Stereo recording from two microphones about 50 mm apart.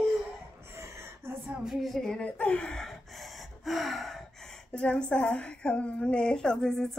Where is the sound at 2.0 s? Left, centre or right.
Centre.